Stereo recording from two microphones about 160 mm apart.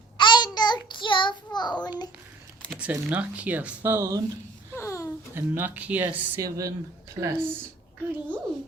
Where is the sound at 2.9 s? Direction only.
10° right (ahead or behind).